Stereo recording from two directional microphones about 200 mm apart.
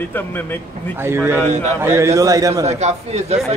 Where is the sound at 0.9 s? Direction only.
10° right (ahead or behind).